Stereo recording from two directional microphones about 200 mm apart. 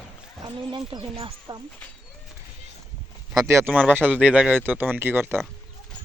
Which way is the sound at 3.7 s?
10° right (ahead or behind).